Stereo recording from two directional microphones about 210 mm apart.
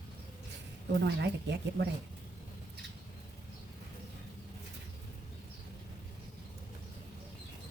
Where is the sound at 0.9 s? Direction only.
55° right (ahead or behind).